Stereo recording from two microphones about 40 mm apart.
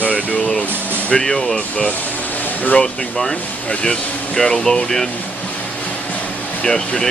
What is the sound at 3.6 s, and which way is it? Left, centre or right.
Speech, left.